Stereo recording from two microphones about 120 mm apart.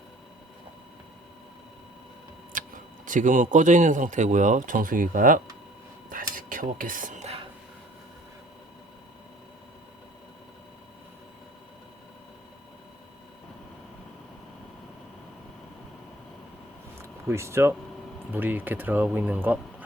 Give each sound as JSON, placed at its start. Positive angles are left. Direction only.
{"t": 2.5, "sound": "tick-tock", "side_deg": -90}
{"t": 3.1, "sound": "speech", "side_deg": -90}
{"t": 6.6, "sound": "speech", "side_deg": -90}
{"t": 17.0, "sound": "a sound", "side_deg": -25}
{"t": 18.3, "sound": "speech", "side_deg": -15}